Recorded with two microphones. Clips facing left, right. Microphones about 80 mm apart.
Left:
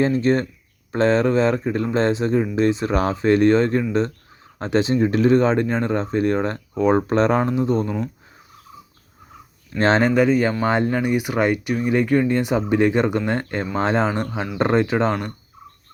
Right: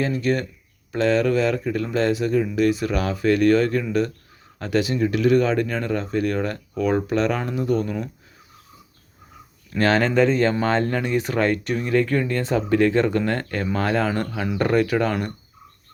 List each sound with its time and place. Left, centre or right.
0.0 s speech: left
9.7 s speech: left